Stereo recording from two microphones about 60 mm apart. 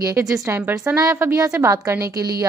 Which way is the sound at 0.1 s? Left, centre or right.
Right.